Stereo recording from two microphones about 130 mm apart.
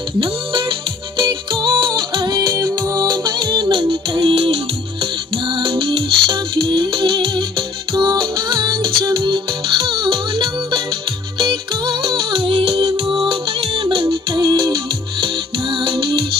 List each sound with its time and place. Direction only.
0.2 s music: 40° right (ahead or behind)